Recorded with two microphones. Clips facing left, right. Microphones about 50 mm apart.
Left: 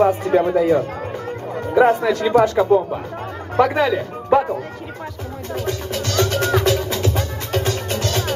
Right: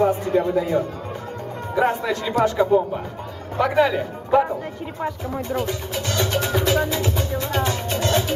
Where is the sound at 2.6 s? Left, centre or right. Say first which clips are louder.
Left 3 dB; left.